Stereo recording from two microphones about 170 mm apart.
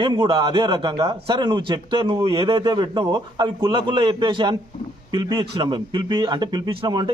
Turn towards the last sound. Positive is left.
turn(degrees=-25)  # may be behind; listen again after turning